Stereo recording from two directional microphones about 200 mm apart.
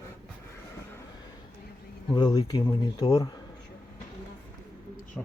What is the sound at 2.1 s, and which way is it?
Speech, 20° left (ahead or behind).